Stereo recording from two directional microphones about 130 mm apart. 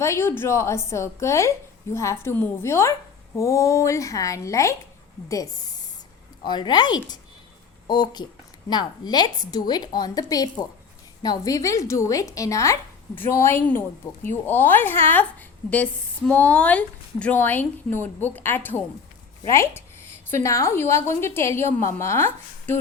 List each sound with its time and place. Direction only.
0.0 s a woman's voice: 20° left (ahead or behind)
6.4 s a woman's voice: 35° left (ahead or behind); by 22.8 s 15° left (ahead or behind)